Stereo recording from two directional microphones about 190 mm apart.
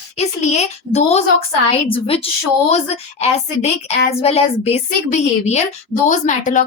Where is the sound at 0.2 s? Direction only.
35° left (ahead or behind).